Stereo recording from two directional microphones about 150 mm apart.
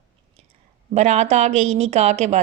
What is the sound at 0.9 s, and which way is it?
Speech, 50° right (ahead or behind).